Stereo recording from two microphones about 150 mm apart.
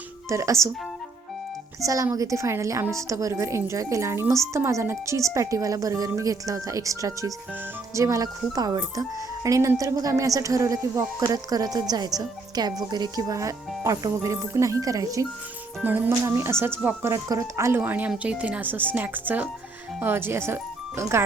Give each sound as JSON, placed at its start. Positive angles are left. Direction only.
{"t": 0.3, "sound": "speech", "side_deg": -20}
{"t": 1.8, "sound": "speech", "side_deg": -20}
{"t": 15.8, "sound": "speech", "side_deg": -10}